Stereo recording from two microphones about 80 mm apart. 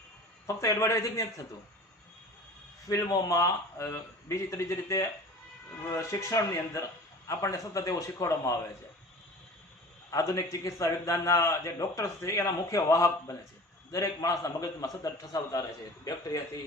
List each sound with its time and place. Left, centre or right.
0.4 s a man's voice: left
2.9 s a man's voice: left
10.1 s a man's voice: left